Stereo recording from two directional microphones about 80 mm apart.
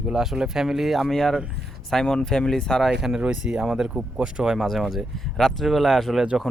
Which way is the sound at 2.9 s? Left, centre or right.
Centre.